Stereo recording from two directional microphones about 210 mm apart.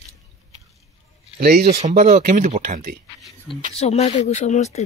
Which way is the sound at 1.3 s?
45° right (ahead or behind).